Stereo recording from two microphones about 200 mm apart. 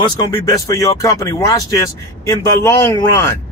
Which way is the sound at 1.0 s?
15° left (ahead or behind).